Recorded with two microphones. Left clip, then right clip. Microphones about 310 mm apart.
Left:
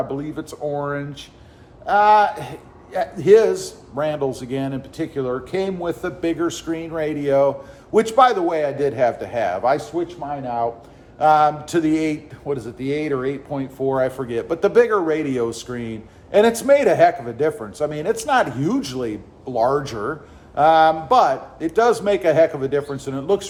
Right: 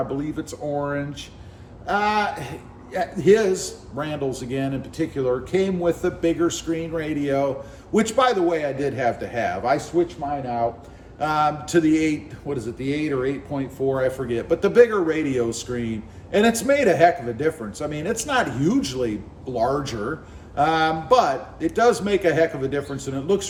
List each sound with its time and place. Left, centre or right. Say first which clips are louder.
0.2 s speech: left 1 dB; centre